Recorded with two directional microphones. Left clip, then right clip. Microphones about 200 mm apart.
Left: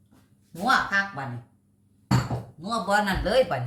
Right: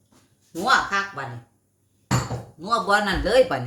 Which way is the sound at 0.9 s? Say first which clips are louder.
Even; 40° right (ahead or behind).